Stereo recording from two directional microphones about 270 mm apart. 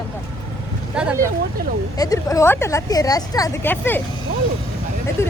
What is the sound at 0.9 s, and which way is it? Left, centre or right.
Speech, centre.